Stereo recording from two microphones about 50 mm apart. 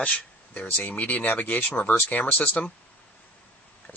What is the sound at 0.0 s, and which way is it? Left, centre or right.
Speech, left.